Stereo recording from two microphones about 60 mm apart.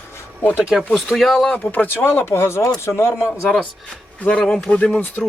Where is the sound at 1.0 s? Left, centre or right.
Centre.